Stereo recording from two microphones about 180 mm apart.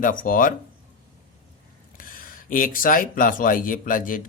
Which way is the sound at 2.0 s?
50° left (ahead or behind).